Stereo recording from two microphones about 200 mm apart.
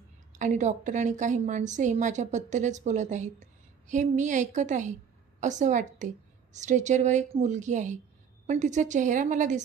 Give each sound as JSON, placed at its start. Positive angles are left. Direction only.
{"t": 0.3, "sound": "a woman's voice", "side_deg": -35}